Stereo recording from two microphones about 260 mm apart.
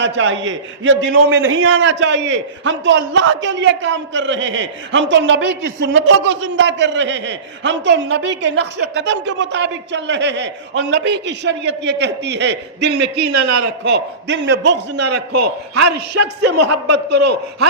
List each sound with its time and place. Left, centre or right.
0.0 s a man's voice: right
15.4 s a man's voice: right
16.1 s a man's voice: right